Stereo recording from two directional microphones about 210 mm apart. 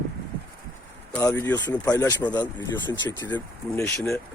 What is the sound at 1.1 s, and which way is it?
Speech, 10° left (ahead or behind).